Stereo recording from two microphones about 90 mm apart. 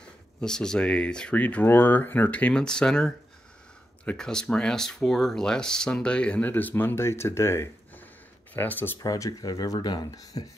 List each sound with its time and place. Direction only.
0.4 s speech: 10° left (ahead or behind)
9.0 s speech: 45° left (ahead or behind)